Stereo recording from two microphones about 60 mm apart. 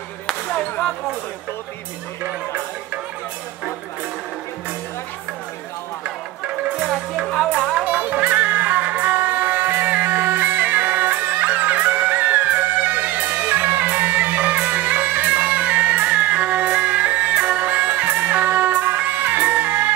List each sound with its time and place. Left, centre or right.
0.5 s basketball bounce: left
6.0 s music: right